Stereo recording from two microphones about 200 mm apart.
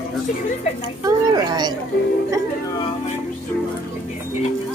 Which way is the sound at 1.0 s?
20° right (ahead or behind).